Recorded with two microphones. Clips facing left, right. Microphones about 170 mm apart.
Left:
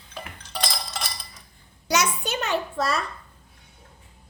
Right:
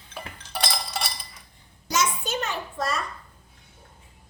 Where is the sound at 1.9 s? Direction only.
70° left (ahead or behind).